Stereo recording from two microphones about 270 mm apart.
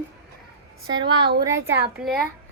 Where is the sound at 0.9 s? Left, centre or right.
Centre.